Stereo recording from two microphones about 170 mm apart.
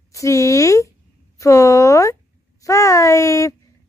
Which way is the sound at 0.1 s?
20° left (ahead or behind).